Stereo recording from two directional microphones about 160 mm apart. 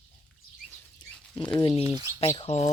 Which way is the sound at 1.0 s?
25° left (ahead or behind).